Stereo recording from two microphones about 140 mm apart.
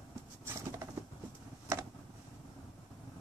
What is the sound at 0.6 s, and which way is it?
Patter, 20° right (ahead or behind).